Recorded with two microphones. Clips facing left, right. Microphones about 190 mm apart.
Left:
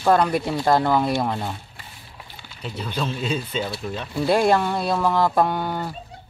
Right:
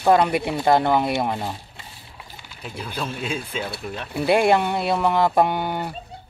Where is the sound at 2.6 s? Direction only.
10° right (ahead or behind).